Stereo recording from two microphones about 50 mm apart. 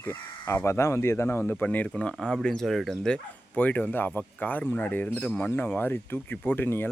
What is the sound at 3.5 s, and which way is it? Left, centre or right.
Speech, left.